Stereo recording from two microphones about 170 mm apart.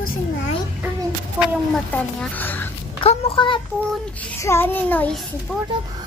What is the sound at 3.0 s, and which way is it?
Babbling, 35° left (ahead or behind).